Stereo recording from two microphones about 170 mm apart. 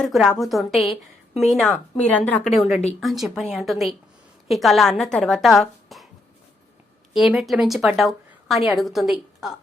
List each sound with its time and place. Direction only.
0.1 s a woman's voice: centre (ahead or behind)
2.6 s speech: 40° left (ahead or behind)
3.0 s a woman's voice: centre (ahead or behind)
7.1 s a woman's voice: centre (ahead or behind)